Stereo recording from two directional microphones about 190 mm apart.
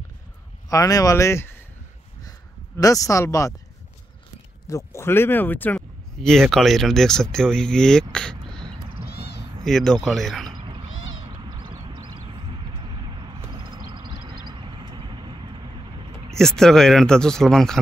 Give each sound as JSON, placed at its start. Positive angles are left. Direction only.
{"t": 0.7, "sound": "speech", "side_deg": 20}
{"t": 2.8, "sound": "speech", "side_deg": 15}
{"t": 4.6, "sound": "speech", "side_deg": 15}
{"t": 10.5, "sound": "cat", "side_deg": -25}
{"t": 10.9, "sound": "a sound", "side_deg": 90}
{"t": 13.2, "sound": "vehicle", "side_deg": -25}
{"t": 16.3, "sound": "speech", "side_deg": 5}